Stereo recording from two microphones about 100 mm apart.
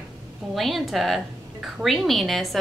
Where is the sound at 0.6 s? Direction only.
Centre (ahead or behind).